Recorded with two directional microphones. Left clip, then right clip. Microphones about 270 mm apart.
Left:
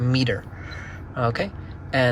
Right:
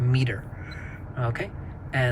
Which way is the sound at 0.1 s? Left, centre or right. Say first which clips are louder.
Left 7 dB; centre.